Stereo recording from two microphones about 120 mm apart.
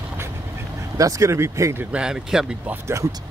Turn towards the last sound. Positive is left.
turn(degrees=-25)  # may be behind; listen again after turning